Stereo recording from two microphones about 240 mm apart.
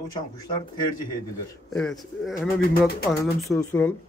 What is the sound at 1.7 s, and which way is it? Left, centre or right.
Speech, centre.